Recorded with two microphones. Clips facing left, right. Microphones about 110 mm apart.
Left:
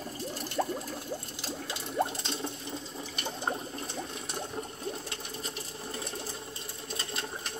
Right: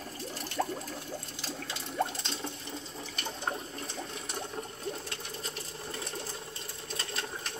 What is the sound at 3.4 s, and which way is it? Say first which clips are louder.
Ratchet: left 2 dB; 10° left (ahead or behind).